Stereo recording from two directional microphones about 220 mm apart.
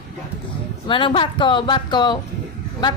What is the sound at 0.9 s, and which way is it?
A woman's voice, 20° left (ahead or behind).